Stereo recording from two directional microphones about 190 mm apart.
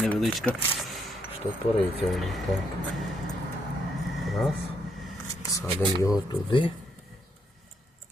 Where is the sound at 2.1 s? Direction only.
Centre (ahead or behind).